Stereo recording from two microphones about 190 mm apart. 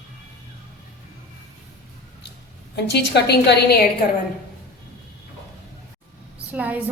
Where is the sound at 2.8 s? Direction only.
60° left (ahead or behind).